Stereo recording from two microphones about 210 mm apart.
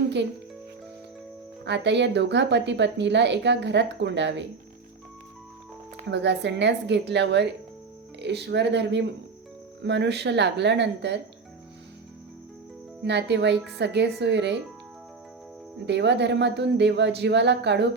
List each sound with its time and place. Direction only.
1.6 s speech: 55° right (ahead or behind)
6.1 s speech: 55° right (ahead or behind)
13.1 s speech: 55° right (ahead or behind)
15.9 s speech: 55° right (ahead or behind)